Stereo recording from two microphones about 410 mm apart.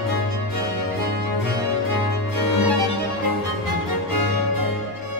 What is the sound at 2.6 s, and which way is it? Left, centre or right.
Music, right.